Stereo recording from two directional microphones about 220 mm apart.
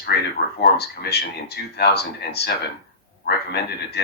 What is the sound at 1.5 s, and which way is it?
Speech, 45° left (ahead or behind).